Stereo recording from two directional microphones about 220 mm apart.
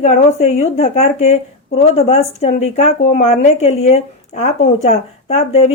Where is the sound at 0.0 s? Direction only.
30° left (ahead or behind).